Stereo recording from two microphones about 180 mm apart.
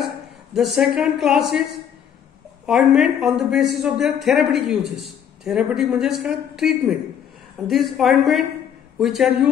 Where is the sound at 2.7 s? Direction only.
Centre (ahead or behind).